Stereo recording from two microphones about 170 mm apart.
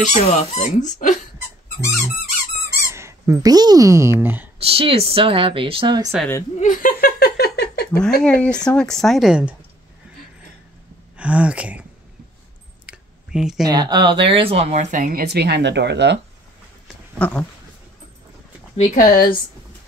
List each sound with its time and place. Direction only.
0.0 s speech: 45° left (ahead or behind)
2.6 s speech: 15° right (ahead or behind)
4.6 s speech: 35° right (ahead or behind)
6.6 s a sound: 55° left (ahead or behind); by 7.9 s 70° left (ahead or behind)
8.2 s speech: 5° left (ahead or behind)
11.1 s speech: 5° right (ahead or behind)
12.8 s clicking: 5° right (ahead or behind)
13.7 s speech: 25° right (ahead or behind); by 16.2 s 90° right
17.2 s speech: 10° left (ahead or behind)
18.8 s speech: 55° left (ahead or behind)